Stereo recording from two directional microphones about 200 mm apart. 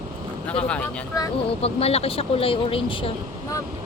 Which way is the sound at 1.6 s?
30° left (ahead or behind).